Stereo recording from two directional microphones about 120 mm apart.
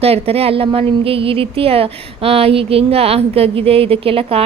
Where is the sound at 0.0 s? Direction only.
55° right (ahead or behind).